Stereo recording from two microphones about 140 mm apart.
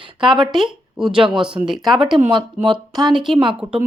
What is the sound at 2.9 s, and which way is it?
Speech, 30° right (ahead or behind).